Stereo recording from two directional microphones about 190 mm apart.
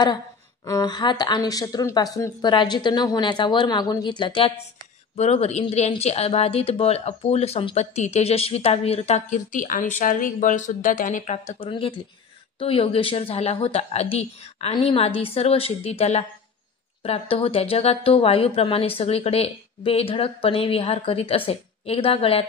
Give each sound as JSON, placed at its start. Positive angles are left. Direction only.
{"t": 0.7, "sound": "speech", "side_deg": 20}
{"t": 11.7, "sound": "speech", "side_deg": 25}